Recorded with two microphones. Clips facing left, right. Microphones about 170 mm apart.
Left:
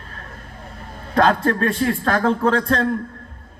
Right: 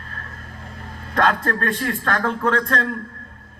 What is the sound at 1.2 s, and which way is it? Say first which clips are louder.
A man's voice: left 3 dB; 30° left (ahead or behind).